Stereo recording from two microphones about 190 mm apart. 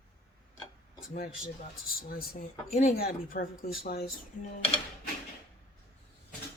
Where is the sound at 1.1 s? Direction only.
50° left (ahead or behind).